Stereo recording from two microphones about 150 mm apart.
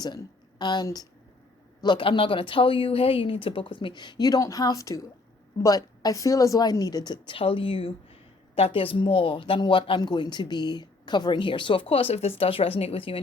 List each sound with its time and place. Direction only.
0.0 s speech: 30° left (ahead or behind)